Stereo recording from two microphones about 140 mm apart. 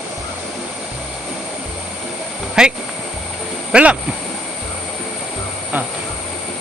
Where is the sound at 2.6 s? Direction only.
5° right (ahead or behind).